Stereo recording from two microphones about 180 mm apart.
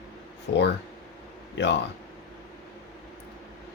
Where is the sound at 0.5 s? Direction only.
70° left (ahead or behind).